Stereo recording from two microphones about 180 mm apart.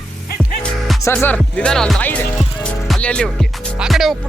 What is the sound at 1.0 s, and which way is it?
Speech, 10° left (ahead or behind).